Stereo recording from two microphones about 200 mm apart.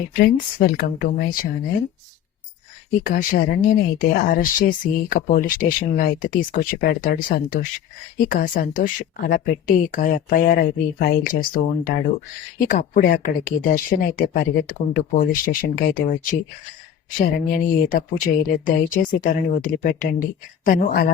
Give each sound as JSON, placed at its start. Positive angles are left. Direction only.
{"t": 0.2, "sound": "speech", "side_deg": 50}
{"t": 3.0, "sound": "speech", "side_deg": 45}
{"t": 17.2, "sound": "speech", "side_deg": 45}